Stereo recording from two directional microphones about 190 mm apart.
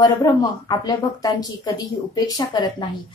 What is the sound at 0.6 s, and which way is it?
A woman's voice, 20° left (ahead or behind).